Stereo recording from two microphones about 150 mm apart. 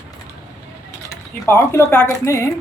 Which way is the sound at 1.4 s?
15° left (ahead or behind).